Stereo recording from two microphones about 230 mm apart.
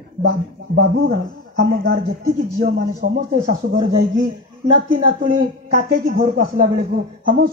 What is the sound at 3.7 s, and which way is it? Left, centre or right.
Speech, right.